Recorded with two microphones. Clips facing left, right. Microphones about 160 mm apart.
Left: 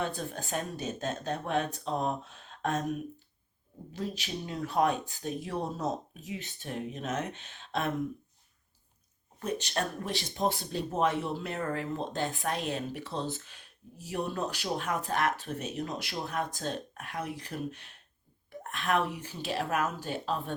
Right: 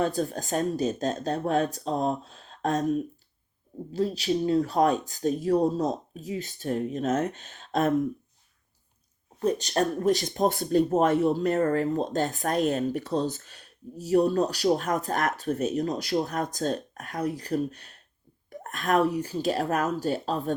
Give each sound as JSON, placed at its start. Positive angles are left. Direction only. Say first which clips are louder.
{"t": 0.0, "sound": "speech", "louder": "right 8 dB", "side_deg": -40}
{"t": 9.4, "sound": "speech", "louder": "right 8 dB", "side_deg": -35}